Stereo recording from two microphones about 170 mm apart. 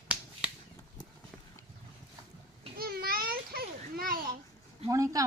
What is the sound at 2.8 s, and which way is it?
Children playing, 60° right (ahead or behind).